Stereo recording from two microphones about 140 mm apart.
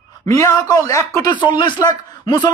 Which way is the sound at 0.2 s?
20° left (ahead or behind).